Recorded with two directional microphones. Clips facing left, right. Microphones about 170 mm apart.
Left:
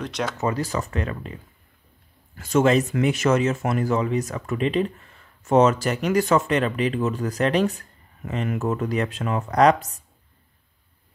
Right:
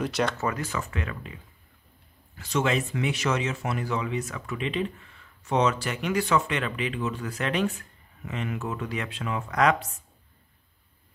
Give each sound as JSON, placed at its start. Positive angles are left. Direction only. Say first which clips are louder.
{"t": 0.0, "sound": "speech", "louder": "right 1 dB", "side_deg": 0}
{"t": 0.6, "sound": "speech", "louder": "left 6 dB", "side_deg": 35}